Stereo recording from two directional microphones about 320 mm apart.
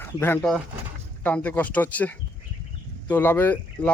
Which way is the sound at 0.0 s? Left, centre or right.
Centre.